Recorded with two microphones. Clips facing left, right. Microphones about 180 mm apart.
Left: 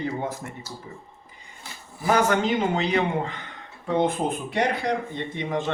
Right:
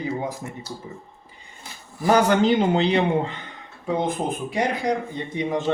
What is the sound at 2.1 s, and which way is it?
A man's voice, 35° right (ahead or behind).